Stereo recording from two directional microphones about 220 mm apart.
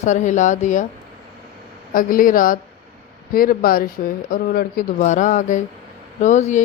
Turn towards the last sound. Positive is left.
turn(degrees=35)  # may be behind; listen again after turning